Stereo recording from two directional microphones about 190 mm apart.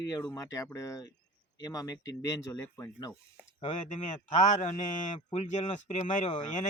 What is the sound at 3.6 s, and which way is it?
A man's voice, 40° left (ahead or behind).